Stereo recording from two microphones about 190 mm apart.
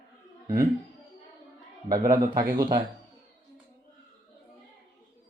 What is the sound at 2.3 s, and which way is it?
Speech, 50° right (ahead or behind).